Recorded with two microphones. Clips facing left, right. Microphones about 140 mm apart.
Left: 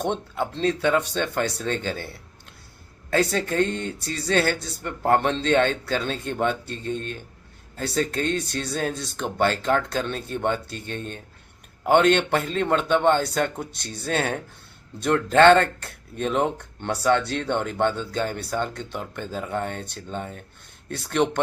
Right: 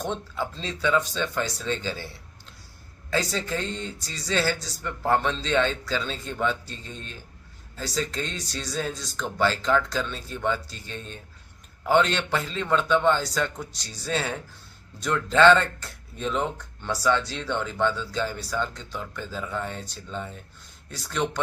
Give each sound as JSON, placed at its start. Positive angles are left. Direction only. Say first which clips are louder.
{"t": 0.0, "sound": "speech", "louder": "left 4 dB", "side_deg": 60}